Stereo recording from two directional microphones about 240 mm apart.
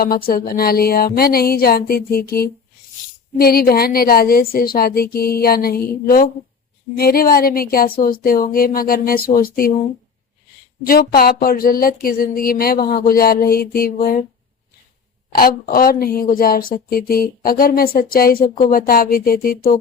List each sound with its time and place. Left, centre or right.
0.0 s a woman's voice: left
10.8 s a woman's voice: left
15.3 s a woman's voice: left